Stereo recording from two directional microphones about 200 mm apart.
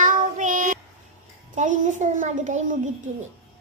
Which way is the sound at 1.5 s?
40° right (ahead or behind).